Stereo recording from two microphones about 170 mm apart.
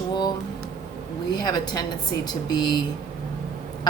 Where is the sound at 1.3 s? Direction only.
25° left (ahead or behind).